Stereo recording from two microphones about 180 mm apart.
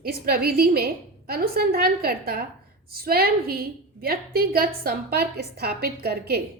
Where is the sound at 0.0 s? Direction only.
60° right (ahead or behind).